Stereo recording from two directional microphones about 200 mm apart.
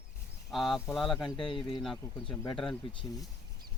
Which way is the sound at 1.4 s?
25° left (ahead or behind).